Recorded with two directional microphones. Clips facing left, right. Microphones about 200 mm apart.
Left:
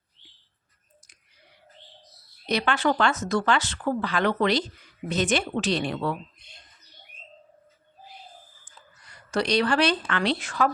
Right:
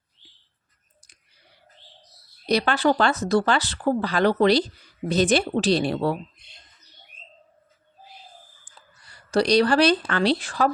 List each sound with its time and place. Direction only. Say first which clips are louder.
2.5 s speech: right 4 dB; 35° right (ahead or behind)
9.0 s speech: right 5 dB; 30° right (ahead or behind)